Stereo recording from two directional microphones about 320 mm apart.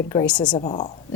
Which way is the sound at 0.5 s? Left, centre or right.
Centre.